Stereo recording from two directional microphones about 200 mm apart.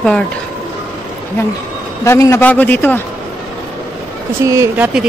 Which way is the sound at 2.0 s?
15° left (ahead or behind).